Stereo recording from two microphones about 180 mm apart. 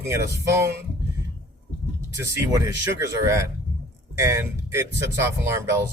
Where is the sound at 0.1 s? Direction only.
15° right (ahead or behind).